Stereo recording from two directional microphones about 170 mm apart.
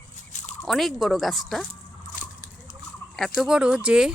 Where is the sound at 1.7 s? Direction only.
50° left (ahead or behind).